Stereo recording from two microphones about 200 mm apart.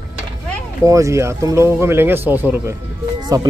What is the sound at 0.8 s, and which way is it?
Speech, 15° right (ahead or behind).